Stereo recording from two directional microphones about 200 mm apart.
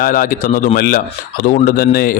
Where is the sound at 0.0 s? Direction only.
45° left (ahead or behind).